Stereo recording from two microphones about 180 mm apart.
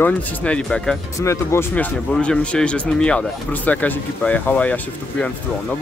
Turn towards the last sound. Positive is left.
turn(degrees=5)  # may be behind; listen again after turning